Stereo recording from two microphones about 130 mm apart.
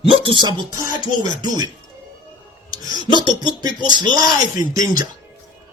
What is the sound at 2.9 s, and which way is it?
Speech, 35° right (ahead or behind).